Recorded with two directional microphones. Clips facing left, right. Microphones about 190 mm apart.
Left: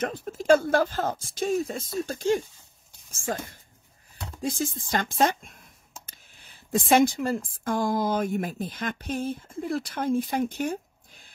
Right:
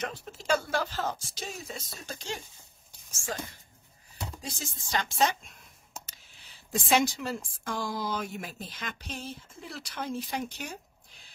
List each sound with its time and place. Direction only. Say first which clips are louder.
0.0 s speech: left 7 dB; 50° left (ahead or behind)
4.4 s speech: left 12 dB; 50° left (ahead or behind)